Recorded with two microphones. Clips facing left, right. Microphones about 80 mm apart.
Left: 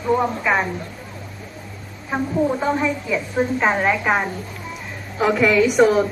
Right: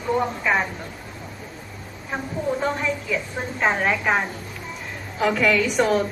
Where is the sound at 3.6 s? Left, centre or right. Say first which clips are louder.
Right 1 dB; centre.